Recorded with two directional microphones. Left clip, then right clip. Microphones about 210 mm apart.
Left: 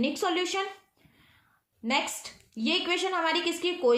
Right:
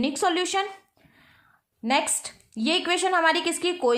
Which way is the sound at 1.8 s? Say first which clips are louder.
Right 5 dB; 40° right (ahead or behind).